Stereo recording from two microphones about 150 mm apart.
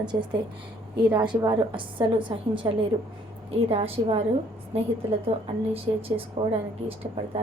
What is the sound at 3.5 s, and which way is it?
A woman's voice, 40° right (ahead or behind).